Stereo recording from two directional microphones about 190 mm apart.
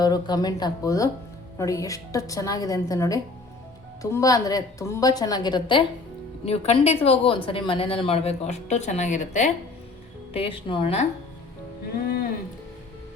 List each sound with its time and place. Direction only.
0.0 s a woman's voice: 20° left (ahead or behind)
6.4 s a woman's voice: 35° left (ahead or behind)